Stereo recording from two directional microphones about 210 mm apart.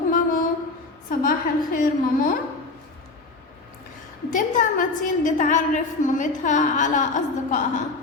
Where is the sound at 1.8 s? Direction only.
40° left (ahead or behind).